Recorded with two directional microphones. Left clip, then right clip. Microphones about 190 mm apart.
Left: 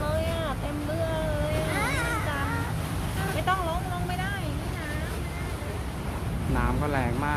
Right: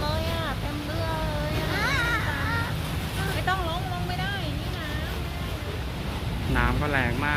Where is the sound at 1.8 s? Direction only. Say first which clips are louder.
Right 7 dB; 30° left (ahead or behind).